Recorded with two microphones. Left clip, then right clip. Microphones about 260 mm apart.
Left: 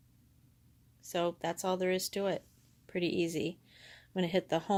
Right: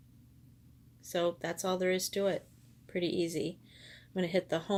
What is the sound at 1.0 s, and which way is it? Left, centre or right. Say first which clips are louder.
Speech: right 1 dB; left.